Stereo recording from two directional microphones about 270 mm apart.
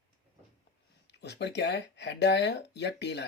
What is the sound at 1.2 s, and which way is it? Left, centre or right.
Speech, left.